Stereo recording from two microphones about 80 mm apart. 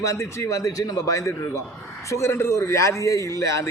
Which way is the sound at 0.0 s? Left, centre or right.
Left.